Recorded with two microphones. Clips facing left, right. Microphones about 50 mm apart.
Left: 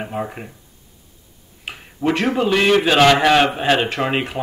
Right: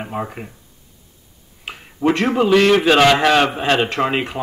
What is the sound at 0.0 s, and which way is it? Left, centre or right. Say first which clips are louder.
Speech: even; centre.